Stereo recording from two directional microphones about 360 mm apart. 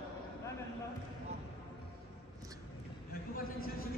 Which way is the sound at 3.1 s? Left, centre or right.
Left.